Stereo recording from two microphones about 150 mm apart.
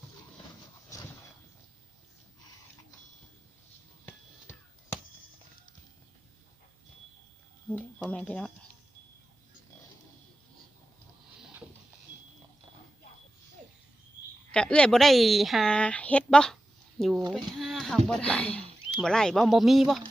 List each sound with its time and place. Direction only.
4.0 s a sound: 15° left (ahead or behind)
7.8 s speech: 10° left (ahead or behind)
14.5 s a woman's voice: 5° left (ahead or behind)